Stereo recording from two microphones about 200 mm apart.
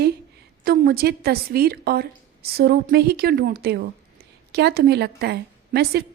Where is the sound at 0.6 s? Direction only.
50° right (ahead or behind).